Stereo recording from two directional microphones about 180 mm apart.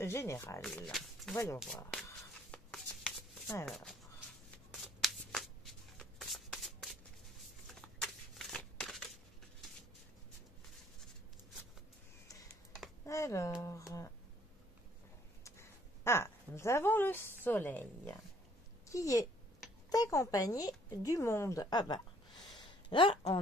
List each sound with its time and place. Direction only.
0.0 s speech: 15° left (ahead or behind)
1.3 s speech: 15° left (ahead or behind)
2.0 s a sound: 5° left (ahead or behind)
3.6 s speech: centre (ahead or behind)
5.0 s shuffling cards: centre (ahead or behind)
13.0 s speech: 15° left (ahead or behind)
15.4 s a woman's voice: 15° left (ahead or behind)